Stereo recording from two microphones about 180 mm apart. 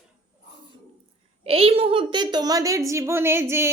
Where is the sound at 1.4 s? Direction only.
35° right (ahead or behind).